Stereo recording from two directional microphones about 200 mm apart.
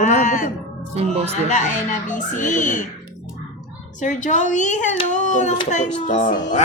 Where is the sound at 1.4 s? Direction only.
35° left (ahead or behind).